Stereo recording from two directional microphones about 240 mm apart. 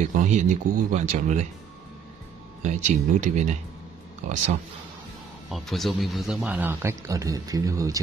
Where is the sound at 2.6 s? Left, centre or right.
Right.